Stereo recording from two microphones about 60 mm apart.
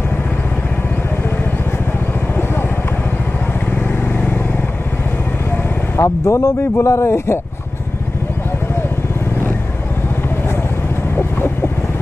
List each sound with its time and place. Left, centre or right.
5.9 s speech: left